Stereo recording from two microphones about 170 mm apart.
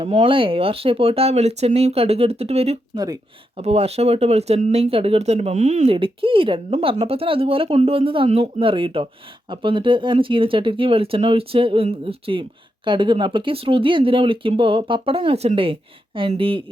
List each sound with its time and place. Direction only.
0.0 s speech: 35° right (ahead or behind)
2.9 s speech: 20° right (ahead or behind)
3.6 s speech: 35° right (ahead or behind)